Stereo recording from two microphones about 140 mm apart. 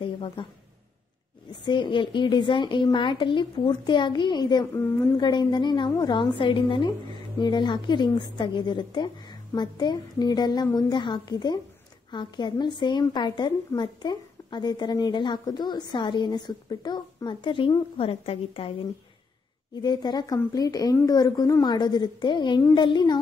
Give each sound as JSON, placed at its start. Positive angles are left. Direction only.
{"t": 0.0, "sound": "a sound", "side_deg": 40}
{"t": 1.6, "sound": "a woman's voice", "side_deg": 35}
{"t": 19.7, "sound": "a woman's voice", "side_deg": 30}